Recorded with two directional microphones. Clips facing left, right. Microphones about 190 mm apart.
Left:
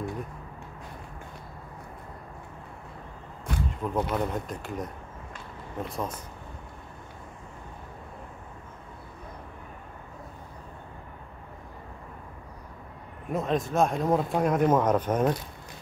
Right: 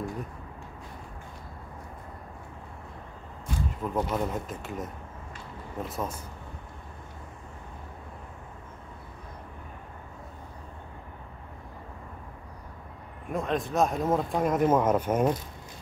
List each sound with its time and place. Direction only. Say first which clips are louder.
3.5 s a sound: left 1 dB; 65° left (ahead or behind)
3.8 s speech: left 1 dB; centre (ahead or behind)
13.3 s speech: left 2 dB; centre (ahead or behind)